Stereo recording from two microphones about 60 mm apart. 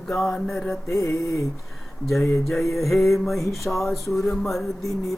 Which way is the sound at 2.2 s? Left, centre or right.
Left.